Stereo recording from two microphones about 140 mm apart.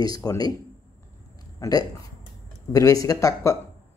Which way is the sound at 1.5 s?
25° left (ahead or behind).